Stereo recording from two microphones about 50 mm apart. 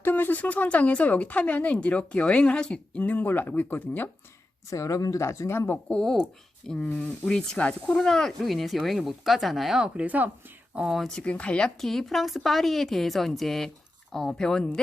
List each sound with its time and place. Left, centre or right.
0.0 s speech: left; by 3.0 s centre
3.0 s speech: left
4.7 s speech: left
5.7 s speech: left
7.9 s speech: centre
9.7 s speech: centre
10.1 s speech: right
11.1 s speech: left
11.8 s speech: centre